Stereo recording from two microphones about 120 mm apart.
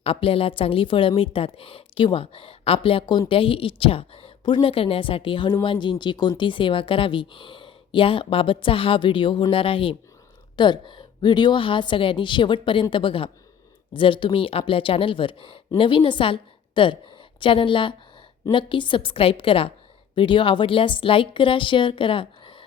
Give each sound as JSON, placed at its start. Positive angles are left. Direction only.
{"t": 0.0, "sound": "a woman's voice", "side_deg": 55}